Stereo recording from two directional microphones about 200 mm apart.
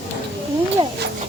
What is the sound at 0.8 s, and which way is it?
Speech, 25° right (ahead or behind).